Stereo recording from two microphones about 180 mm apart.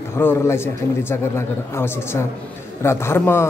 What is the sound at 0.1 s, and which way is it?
Speech, 15° left (ahead or behind).